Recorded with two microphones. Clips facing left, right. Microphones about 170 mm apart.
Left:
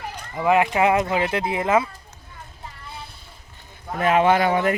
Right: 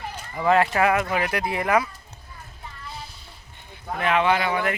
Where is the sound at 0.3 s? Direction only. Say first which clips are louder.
Left 1 dB; 15° left (ahead or behind).